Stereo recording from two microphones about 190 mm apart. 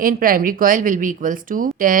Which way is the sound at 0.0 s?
50° right (ahead or behind).